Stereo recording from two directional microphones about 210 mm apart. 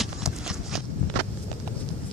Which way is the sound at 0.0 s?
Centre (ahead or behind).